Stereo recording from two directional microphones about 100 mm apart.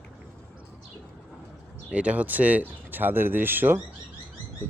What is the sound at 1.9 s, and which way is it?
Speech, 10° right (ahead or behind).